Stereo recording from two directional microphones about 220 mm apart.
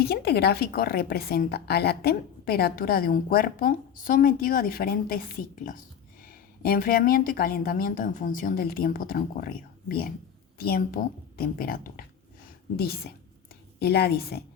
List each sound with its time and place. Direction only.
0.0 s a woman's voice: 45° left (ahead or behind)